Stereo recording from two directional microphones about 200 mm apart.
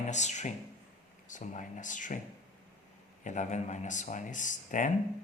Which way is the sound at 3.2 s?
35° left (ahead or behind).